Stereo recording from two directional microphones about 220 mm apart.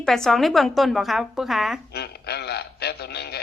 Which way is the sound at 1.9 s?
45° left (ahead or behind).